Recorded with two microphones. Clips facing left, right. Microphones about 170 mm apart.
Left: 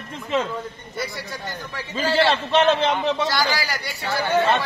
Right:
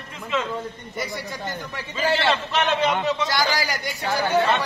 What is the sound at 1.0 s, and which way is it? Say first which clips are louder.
Speech: even; 20° right (ahead or behind).